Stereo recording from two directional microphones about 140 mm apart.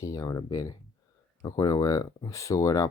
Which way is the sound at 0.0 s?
25° left (ahead or behind).